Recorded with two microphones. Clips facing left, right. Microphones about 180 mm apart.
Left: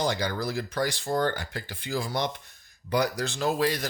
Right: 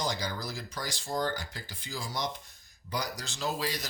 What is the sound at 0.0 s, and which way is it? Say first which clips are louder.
Speech: left 6 dB; 60° left (ahead or behind).